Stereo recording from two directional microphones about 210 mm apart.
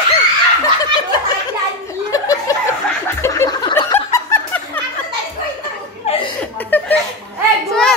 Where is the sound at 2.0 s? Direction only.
15° left (ahead or behind).